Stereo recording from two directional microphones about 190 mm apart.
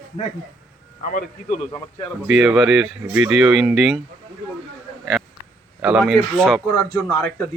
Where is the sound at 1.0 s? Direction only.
45° left (ahead or behind).